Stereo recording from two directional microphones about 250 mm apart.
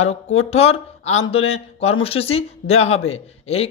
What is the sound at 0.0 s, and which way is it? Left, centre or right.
Speech, left.